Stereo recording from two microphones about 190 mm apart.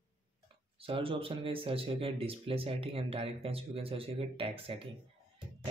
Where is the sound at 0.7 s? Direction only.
30° right (ahead or behind).